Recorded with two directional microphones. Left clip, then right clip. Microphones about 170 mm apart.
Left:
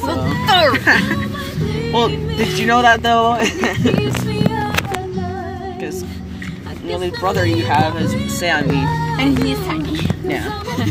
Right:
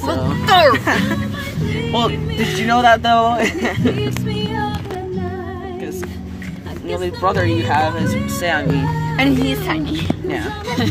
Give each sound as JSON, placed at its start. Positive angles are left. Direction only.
{"t": 0.5, "sound": "music", "side_deg": -25}
{"t": 1.9, "sound": "speech", "side_deg": -10}
{"t": 2.6, "sound": "speech", "side_deg": 0}
{"t": 6.9, "sound": "speech", "side_deg": 0}
{"t": 8.7, "sound": "music", "side_deg": -25}